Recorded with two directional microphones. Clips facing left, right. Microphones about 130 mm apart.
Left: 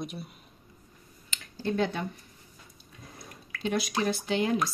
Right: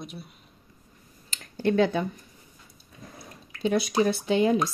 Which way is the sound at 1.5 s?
65° right (ahead or behind).